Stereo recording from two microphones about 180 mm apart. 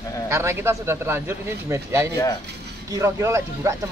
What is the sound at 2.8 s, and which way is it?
Speech, 15° right (ahead or behind).